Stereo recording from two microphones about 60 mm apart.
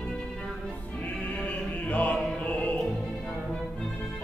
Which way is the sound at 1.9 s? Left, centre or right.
Left.